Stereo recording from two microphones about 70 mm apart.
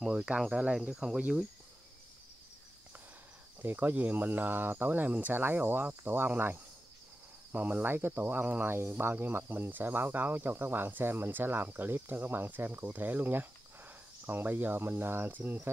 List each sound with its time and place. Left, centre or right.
0.0 s speech: centre
3.6 s speech: right